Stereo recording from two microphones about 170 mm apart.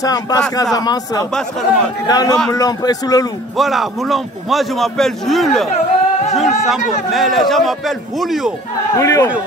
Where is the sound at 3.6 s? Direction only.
Centre (ahead or behind).